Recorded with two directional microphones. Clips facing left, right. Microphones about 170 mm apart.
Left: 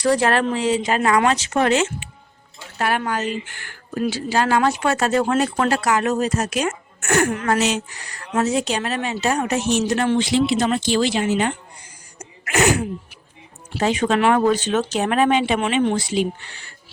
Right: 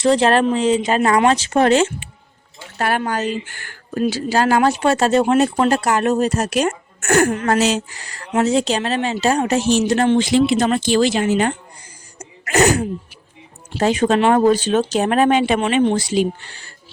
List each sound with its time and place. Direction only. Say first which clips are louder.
0.0 s speech: right 4 dB; 25° right (ahead or behind)
1.0 s a woman's voice: right 2 dB; 30° right (ahead or behind)
6.2 s speech: right 3 dB; 60° right (ahead or behind)
6.7 s a woman's voice: right 4 dB; 40° right (ahead or behind)
12.2 s sneeze: right 3 dB; 40° right (ahead or behind)
13.7 s a woman's voice: right 3 dB; 40° right (ahead or behind)